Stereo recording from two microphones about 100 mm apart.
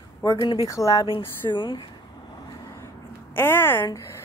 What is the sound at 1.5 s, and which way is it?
Vehicle, 50° left (ahead or behind).